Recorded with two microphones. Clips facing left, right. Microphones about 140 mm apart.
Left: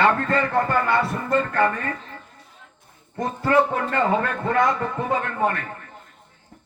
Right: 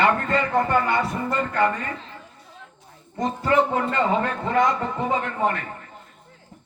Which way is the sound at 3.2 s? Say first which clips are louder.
Left 1 dB; 20° right (ahead or behind).